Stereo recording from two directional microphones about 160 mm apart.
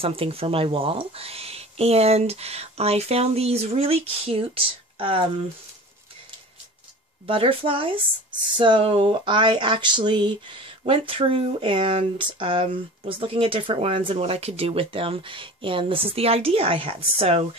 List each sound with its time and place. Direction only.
0.0 s speech: 35° right (ahead or behind)
7.2 s speech: 35° right (ahead or behind)